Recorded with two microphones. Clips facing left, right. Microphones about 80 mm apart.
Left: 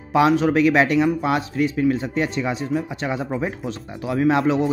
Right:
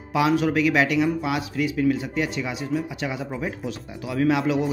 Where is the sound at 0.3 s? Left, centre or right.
Left.